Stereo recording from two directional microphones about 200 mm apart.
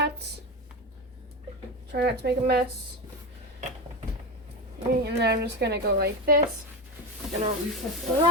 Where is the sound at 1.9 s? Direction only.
55° right (ahead or behind).